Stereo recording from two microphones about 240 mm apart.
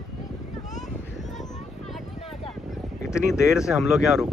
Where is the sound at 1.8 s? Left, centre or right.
Centre.